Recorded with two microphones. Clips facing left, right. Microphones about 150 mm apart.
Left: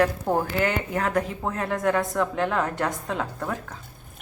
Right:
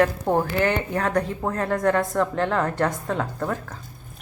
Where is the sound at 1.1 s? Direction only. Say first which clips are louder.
Right 2 dB; 5° left (ahead or behind).